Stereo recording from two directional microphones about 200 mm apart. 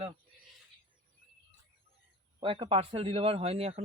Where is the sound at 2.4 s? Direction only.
25° right (ahead or behind).